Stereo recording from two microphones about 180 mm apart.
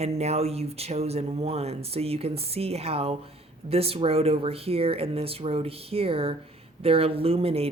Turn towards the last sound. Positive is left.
turn(degrees=-35)  # may be behind; listen again after turning